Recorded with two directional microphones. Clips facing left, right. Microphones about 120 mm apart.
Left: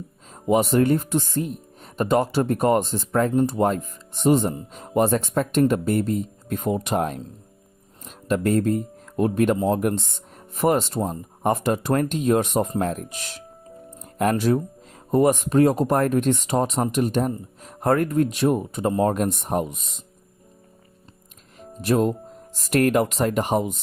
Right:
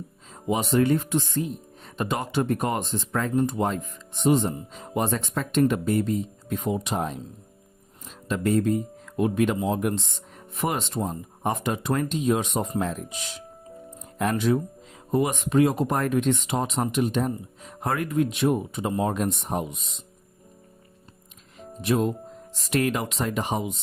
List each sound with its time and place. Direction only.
0.4 s speech: 45° left (ahead or behind)
21.8 s speech: 45° left (ahead or behind)